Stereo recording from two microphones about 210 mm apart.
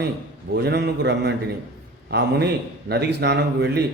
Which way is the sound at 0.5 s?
55° right (ahead or behind).